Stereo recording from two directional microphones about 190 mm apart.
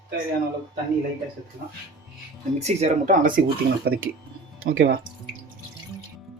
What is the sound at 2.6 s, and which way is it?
Speech, 35° right (ahead or behind).